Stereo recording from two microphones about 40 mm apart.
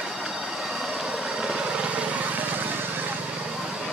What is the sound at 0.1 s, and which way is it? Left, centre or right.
Vehicle, centre.